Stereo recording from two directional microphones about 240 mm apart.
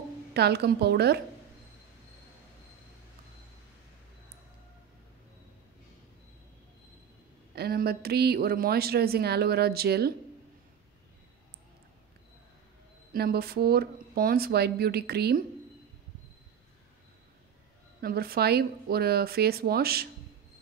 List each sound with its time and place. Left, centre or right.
0.3 s a woman's voice: right
7.5 s speech: right
13.1 s speech: right
18.0 s speech: right